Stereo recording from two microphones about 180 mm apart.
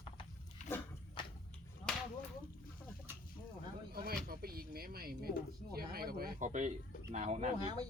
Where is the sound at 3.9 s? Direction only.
55° right (ahead or behind).